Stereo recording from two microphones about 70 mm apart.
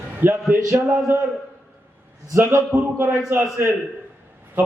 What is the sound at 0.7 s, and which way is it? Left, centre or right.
Speech, right.